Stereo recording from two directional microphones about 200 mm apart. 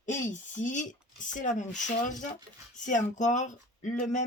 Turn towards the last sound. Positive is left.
turn(degrees=40)  # may be behind; listen again after turning